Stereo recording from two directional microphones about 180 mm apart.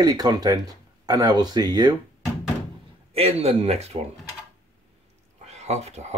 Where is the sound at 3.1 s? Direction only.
35° right (ahead or behind).